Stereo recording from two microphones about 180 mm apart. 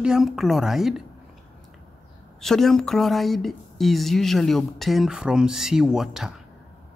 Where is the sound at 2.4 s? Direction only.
Centre (ahead or behind).